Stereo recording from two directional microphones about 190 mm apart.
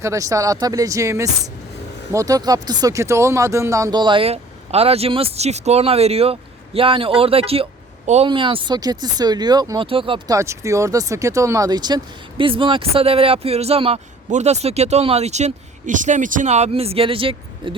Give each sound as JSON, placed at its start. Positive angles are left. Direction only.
{"t": 0.0, "sound": "speech", "side_deg": -15}